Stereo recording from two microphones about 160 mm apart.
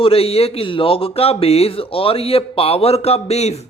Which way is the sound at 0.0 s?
35° left (ahead or behind).